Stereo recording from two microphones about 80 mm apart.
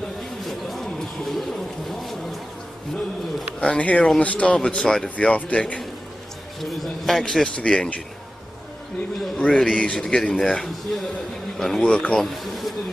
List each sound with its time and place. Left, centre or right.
0.5 s a sound: centre
3.7 s a man's voice: centre
6.6 s a man's voice: centre
7.4 s a man's voice: centre
9.4 s a man's voice: centre